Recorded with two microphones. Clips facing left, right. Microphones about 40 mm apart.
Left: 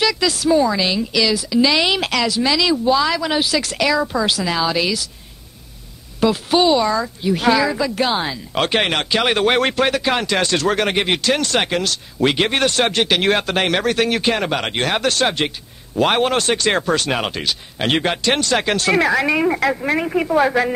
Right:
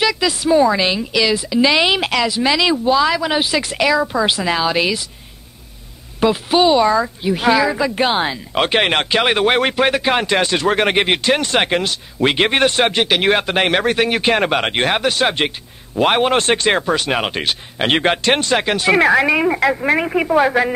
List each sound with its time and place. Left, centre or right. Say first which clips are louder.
0.0 s a woman's voice: right 1 dB; centre
2.9 s a woman's voice: right 3 dB; centre
3.3 s a woman's voice: right 1 dB; right
4.3 s speech: right 2 dB; right
6.2 s speech: right 1 dB; centre
9.2 s speech: even; centre
14.2 s a woman's voice: right 3 dB; right; by 16.3 s centre
16.3 s speech: right 2 dB; right
16.7 s a woman's voice: right 1 dB; centre
17.3 s speech: right 2 dB; right
18.6 s a woman's voice: right 2 dB; centre
18.9 s speech: right 5 dB; right
19.2 s a woman's voice: right 2 dB; centre